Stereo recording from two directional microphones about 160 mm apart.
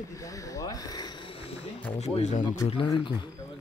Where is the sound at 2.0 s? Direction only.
45° left (ahead or behind).